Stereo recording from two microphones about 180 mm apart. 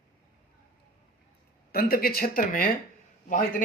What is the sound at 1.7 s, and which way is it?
A man's voice, 55° left (ahead or behind).